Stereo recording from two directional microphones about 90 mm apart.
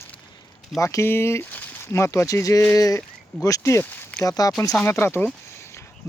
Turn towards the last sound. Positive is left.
turn(degrees=30)  # may be behind; listen again after turning